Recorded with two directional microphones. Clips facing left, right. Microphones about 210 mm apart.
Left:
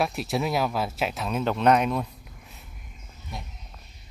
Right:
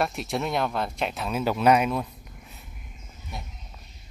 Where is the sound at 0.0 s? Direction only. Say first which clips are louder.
Left 1 dB; centre (ahead or behind).